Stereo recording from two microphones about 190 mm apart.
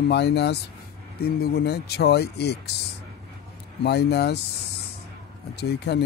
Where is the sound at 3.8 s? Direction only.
60° left (ahead or behind).